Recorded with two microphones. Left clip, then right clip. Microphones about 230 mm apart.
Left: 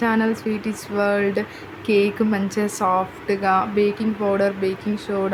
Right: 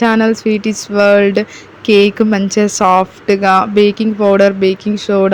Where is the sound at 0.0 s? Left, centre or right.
Right.